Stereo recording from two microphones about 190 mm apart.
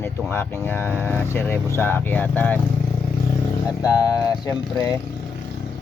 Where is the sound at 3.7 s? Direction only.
20° left (ahead or behind).